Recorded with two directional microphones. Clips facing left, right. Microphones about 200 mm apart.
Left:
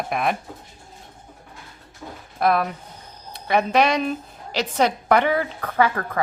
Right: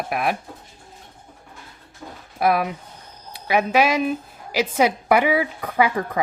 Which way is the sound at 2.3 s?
10° right (ahead or behind).